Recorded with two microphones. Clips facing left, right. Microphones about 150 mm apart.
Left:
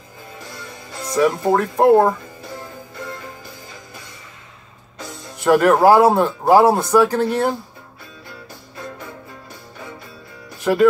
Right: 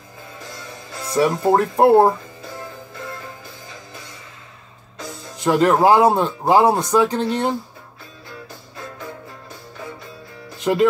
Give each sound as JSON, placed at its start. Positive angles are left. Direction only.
{"t": 1.1, "sound": "speech", "side_deg": -30}
{"t": 5.4, "sound": "speech", "side_deg": -15}